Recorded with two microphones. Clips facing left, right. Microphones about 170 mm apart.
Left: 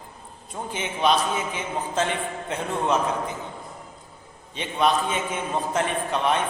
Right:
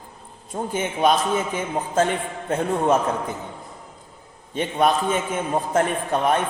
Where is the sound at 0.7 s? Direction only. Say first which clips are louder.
Right 3 dB; 50° right (ahead or behind).